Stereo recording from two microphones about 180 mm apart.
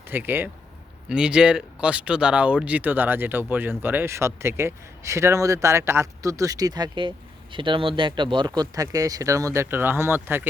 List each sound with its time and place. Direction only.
0.1 s speech: 10° right (ahead or behind)